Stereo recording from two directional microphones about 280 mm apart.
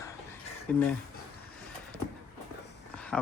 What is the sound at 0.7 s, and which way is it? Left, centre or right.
Speech, centre.